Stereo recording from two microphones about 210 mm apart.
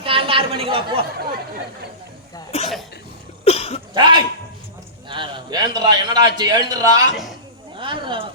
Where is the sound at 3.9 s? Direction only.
20° right (ahead or behind).